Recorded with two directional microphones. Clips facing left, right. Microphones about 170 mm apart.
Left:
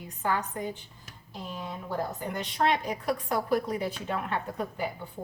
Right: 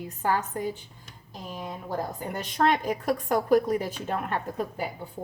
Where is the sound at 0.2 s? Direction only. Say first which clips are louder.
Right 3 dB; 45° right (ahead or behind).